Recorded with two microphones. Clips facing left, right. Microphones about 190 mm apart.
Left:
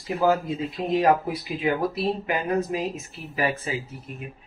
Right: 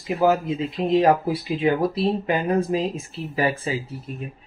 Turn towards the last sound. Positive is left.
turn(degrees=-30)  # may be behind; listen again after turning